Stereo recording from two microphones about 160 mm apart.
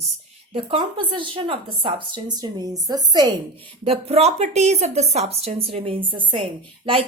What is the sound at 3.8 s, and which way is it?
Speech, 40° right (ahead or behind).